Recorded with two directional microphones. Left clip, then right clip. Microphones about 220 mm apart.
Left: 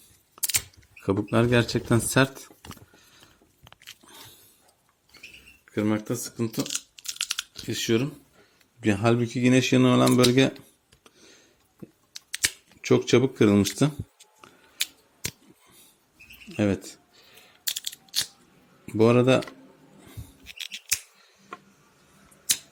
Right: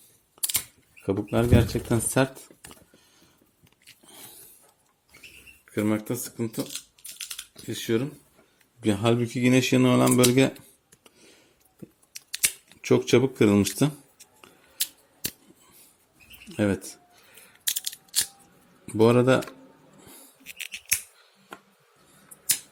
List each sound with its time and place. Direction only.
1.0 s speech: 15° left (ahead or behind)
3.6 s a sound: 30° left (ahead or behind)
5.6 s speech: 5° left (ahead or behind); by 6.7 s 20° left (ahead or behind)
6.9 s computer keyboard: 45° left (ahead or behind)
7.7 s speech: 25° left (ahead or behind)
8.8 s speech: 5° left (ahead or behind)
11.0 s a sound: centre (ahead or behind)
12.1 s camera: 5° left (ahead or behind)
16.5 s a sound: 5° left (ahead or behind)
18.9 s speech: 5° left (ahead or behind)
20.1 s scissors: 5° left (ahead or behind)